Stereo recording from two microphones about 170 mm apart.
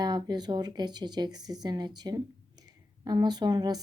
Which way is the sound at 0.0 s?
25° right (ahead or behind).